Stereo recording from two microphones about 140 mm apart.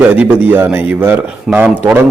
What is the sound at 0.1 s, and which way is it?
A man's voice, 10° right (ahead or behind).